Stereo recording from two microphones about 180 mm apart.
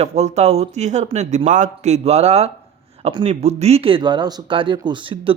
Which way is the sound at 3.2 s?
35° right (ahead or behind).